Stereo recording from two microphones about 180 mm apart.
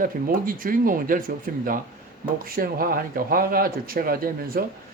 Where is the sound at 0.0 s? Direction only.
50° right (ahead or behind).